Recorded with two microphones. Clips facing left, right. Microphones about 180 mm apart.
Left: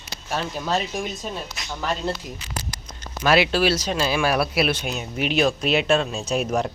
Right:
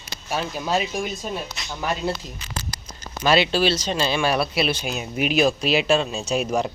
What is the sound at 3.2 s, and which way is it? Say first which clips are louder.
Speech: even; centre (ahead or behind).